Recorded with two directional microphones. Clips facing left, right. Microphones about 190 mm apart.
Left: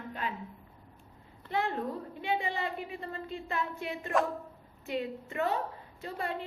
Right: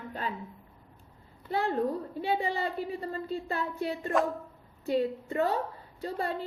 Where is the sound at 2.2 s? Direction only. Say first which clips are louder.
Right 2 dB; 35° right (ahead or behind).